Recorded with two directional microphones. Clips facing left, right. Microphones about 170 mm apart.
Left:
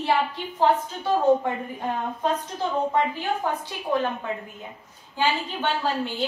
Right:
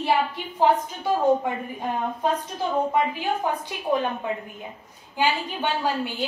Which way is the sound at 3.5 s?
15° right (ahead or behind).